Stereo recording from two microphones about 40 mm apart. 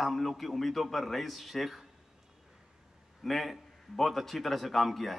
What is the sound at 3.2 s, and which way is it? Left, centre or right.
A man's voice, centre.